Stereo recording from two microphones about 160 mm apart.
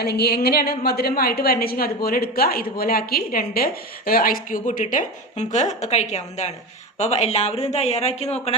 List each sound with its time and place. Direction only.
0.0 s a woman's voice: 85° left; by 8.5 s 40° left (ahead or behind)